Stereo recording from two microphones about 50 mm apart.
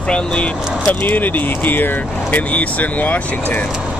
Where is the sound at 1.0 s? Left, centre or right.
Left.